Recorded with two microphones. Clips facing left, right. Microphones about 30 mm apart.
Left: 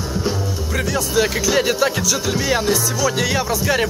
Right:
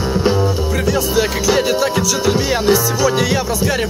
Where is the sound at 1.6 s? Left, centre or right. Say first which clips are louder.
Left 1 dB; centre.